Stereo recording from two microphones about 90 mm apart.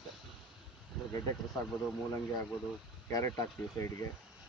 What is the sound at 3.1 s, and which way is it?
Speech, 40° left (ahead or behind).